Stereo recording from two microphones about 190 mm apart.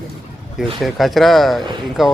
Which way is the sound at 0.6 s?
Centre (ahead or behind).